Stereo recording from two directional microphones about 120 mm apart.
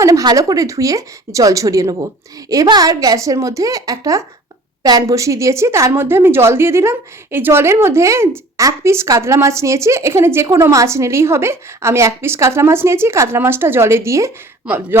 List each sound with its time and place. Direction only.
0.0 s a woman's voice: 30° right (ahead or behind)